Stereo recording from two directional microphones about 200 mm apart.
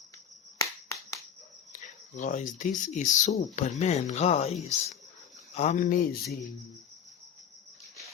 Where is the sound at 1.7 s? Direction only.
40° left (ahead or behind).